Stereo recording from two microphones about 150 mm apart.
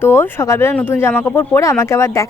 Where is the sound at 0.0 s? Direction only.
15° left (ahead or behind).